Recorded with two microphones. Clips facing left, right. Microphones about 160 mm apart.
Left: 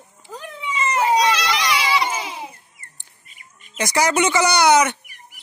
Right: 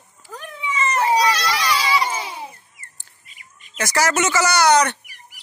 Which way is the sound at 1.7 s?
10° left (ahead or behind).